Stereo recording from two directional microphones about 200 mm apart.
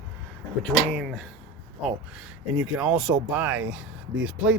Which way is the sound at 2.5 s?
5° right (ahead or behind).